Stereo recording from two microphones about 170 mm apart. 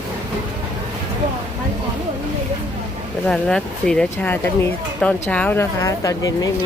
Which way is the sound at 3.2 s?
5° left (ahead or behind).